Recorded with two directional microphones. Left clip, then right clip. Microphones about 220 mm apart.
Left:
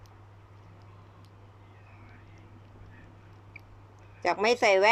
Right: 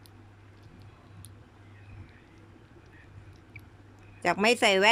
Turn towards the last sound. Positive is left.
turn(degrees=-35)  # may be behind; listen again after turning